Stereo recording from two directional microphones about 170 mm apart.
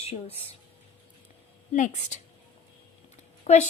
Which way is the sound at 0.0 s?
35° left (ahead or behind).